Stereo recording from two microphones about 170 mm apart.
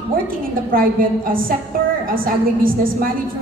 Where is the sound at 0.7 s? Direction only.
55° right (ahead or behind).